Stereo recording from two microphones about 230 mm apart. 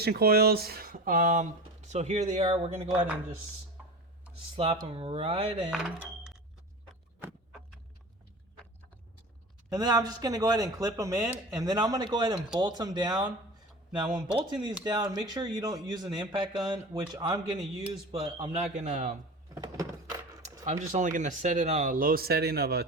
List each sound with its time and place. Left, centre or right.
0.0 s speech: right
4.5 s speech: right
7.2 s a sound: centre
9.6 s speech: centre
14.3 s speech: centre
19.5 s door: centre
20.8 s speech: right